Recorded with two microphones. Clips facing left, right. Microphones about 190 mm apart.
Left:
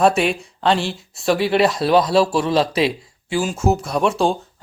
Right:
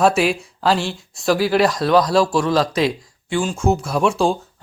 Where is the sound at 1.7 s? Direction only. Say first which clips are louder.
Even; 30° left (ahead or behind).